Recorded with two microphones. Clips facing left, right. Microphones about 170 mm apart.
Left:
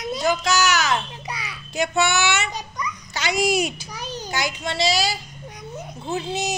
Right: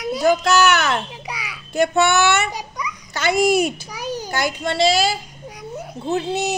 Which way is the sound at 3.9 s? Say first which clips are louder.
Right 5 dB; 10° right (ahead or behind).